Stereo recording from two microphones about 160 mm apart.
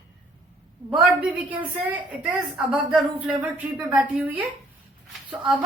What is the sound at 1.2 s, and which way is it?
A woman's voice, 10° right (ahead or behind).